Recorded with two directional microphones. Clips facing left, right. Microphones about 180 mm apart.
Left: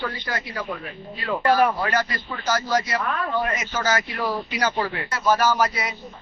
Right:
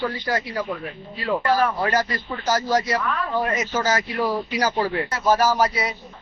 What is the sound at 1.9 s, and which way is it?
Speech, 40° right (ahead or behind).